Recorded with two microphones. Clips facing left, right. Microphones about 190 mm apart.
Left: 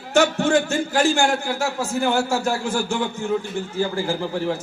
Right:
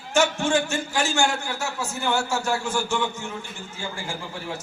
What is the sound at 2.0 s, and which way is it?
Speech, 35° left (ahead or behind).